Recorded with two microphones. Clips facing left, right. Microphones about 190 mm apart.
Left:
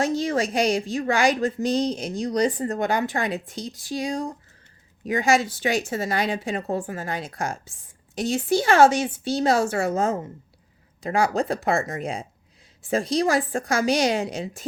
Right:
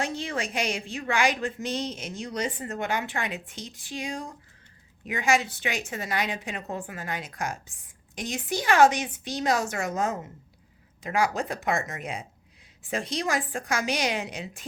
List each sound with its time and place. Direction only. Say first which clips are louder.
0.0 s a woman's voice: left 8 dB; 40° left (ahead or behind)